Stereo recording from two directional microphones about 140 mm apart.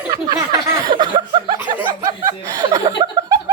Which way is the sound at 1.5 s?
20° right (ahead or behind).